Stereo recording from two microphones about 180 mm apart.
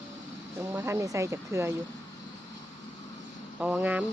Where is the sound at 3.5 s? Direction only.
10° right (ahead or behind).